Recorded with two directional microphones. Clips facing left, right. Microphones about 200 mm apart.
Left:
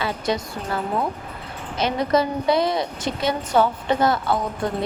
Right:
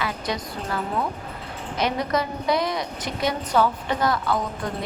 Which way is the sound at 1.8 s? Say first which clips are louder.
Left 4 dB; 30° left (ahead or behind).